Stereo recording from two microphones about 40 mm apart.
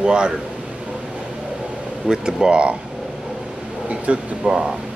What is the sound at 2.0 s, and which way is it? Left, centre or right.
Speech, centre.